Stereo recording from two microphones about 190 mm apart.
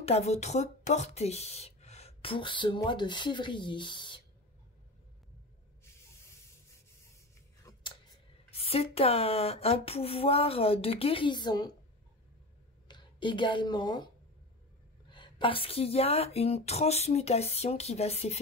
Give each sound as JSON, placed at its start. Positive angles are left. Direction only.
{"t": 0.0, "sound": "speech", "side_deg": 35}
{"t": 7.7, "sound": "scissors", "side_deg": 20}
{"t": 8.5, "sound": "a woman's voice", "side_deg": 30}
{"t": 12.8, "sound": "a woman's voice", "side_deg": 25}